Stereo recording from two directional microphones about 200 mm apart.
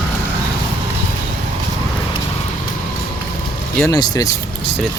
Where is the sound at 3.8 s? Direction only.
20° left (ahead or behind).